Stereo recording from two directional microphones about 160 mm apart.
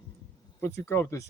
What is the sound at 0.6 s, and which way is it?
Speech, 15° left (ahead or behind).